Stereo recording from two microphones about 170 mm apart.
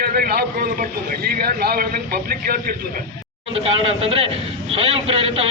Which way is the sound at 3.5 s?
35° right (ahead or behind).